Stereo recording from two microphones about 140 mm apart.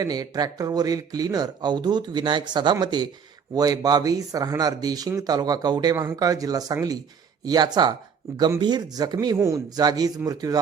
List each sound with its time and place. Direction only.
0.0 s speech: 25° right (ahead or behind)